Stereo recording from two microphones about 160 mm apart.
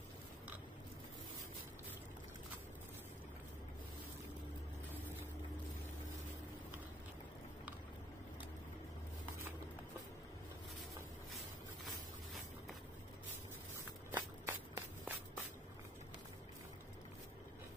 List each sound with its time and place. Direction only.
14.1 s walk: 20° right (ahead or behind)